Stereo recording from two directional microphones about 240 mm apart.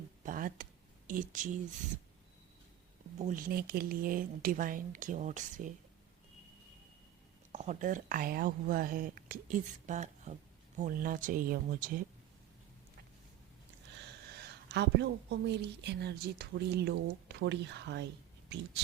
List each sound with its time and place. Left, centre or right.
0.2 s a sound: right
3.2 s speech: right
7.5 s speech: right
14.3 s a woman's voice: right